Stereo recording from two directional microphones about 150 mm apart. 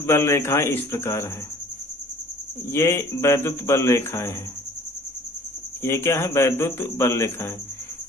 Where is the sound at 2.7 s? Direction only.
15° left (ahead or behind).